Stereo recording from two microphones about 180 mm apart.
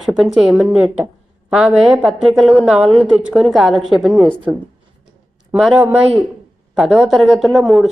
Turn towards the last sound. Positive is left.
turn(degrees=0)  # may be behind; listen again after turning